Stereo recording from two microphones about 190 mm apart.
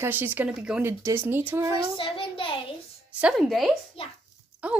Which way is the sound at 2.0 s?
30° left (ahead or behind).